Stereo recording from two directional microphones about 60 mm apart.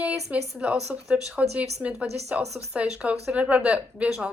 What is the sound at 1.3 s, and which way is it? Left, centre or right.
Speech, right.